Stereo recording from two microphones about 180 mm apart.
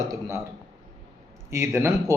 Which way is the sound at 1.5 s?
15° right (ahead or behind).